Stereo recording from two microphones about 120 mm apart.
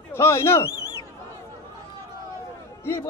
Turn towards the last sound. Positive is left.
turn(degrees=20)  # may be behind; listen again after turning